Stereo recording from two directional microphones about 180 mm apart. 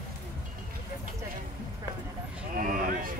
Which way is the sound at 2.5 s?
50° right (ahead or behind).